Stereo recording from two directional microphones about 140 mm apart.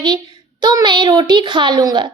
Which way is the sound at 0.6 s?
30° right (ahead or behind).